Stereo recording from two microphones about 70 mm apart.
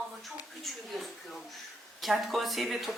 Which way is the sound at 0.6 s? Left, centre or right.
Centre.